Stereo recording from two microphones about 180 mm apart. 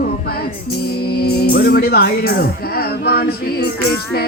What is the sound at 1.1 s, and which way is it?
Music, 60° left (ahead or behind).